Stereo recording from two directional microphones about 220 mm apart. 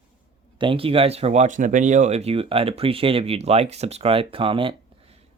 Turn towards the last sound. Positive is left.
turn(degrees=-25)  # may be behind; listen again after turning